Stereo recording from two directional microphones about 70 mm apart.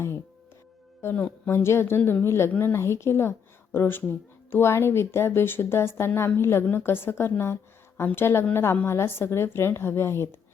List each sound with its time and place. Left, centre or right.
1.5 s a woman's voice: left
2.0 s a woman's voice: left
2.2 s a woman's voice: left
2.5 s a woman's voice: left
2.7 s a woman's voice: left